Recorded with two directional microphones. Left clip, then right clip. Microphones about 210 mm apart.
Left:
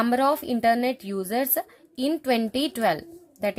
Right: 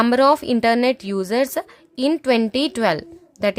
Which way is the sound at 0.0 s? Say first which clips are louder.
Right 7 dB; 25° right (ahead or behind).